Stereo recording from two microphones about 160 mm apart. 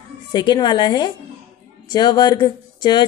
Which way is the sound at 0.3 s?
25° left (ahead or behind).